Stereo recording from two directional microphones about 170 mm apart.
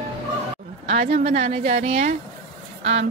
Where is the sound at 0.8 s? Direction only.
40° right (ahead or behind).